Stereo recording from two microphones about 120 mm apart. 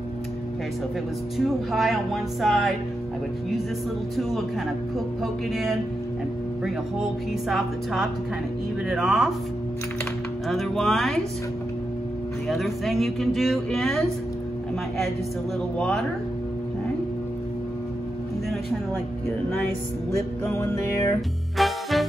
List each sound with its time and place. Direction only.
1.7 s speech: centre (ahead or behind)
4.2 s speech: centre (ahead or behind)
10.5 s speech: centre (ahead or behind)
12.4 s speech: centre (ahead or behind)
15.8 s speech: centre (ahead or behind)
20.4 s music: 20° left (ahead or behind)
21.5 s music: centre (ahead or behind)